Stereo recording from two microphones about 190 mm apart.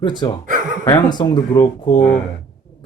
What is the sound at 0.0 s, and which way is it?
Speech, 25° left (ahead or behind).